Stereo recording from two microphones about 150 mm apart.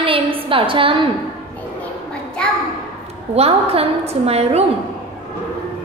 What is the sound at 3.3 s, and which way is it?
A woman's voice, 40° right (ahead or behind).